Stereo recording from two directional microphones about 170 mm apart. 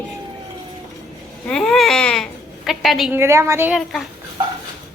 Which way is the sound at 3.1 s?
15° right (ahead or behind).